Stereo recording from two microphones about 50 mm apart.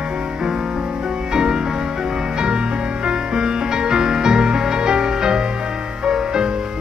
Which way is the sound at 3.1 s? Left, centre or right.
Centre.